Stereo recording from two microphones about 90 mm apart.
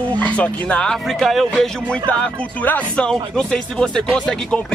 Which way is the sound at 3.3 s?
5° left (ahead or behind).